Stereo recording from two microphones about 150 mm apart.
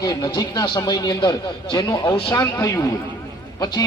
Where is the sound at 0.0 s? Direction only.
25° left (ahead or behind).